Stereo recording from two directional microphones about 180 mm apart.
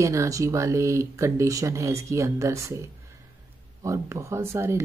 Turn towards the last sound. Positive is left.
turn(degrees=-15)  # may be behind; listen again after turning